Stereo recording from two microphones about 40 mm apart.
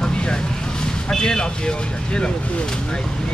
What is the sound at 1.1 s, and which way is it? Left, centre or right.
Speech, centre.